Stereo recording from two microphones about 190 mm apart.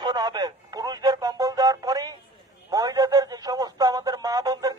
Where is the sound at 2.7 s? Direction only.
20° right (ahead or behind).